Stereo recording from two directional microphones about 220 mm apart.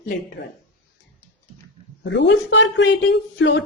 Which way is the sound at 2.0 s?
55° left (ahead or behind).